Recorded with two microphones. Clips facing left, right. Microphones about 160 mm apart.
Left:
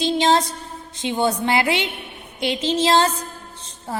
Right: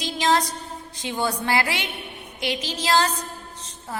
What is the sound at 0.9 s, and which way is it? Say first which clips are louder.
A woman's voice: left 5 dB; 20° left (ahead or behind).